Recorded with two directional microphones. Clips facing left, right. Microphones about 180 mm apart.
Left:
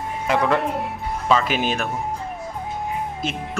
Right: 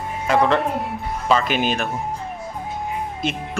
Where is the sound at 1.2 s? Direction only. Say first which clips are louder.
Right 1 dB; centre (ahead or behind).